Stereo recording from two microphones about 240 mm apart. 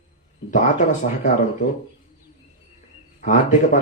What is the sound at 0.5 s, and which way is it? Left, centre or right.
Speech, left.